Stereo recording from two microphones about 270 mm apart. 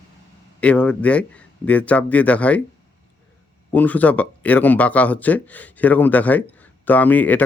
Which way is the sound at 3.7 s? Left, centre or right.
Centre.